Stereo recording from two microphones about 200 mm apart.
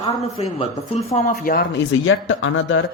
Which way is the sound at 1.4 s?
45° left (ahead or behind).